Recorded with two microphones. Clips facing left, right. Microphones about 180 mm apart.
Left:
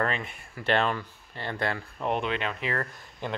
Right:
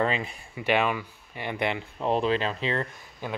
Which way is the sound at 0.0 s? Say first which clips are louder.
Right 3 dB; 5° right (ahead or behind).